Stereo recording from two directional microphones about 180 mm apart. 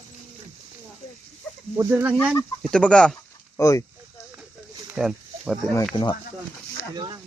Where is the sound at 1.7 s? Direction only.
10° right (ahead or behind).